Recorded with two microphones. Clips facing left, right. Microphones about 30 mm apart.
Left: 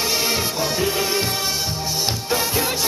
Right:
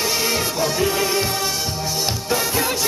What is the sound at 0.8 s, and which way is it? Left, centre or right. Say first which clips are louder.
Music: right 2 dB; centre.